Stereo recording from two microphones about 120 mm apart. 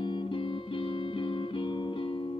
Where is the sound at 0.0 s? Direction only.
45° left (ahead or behind).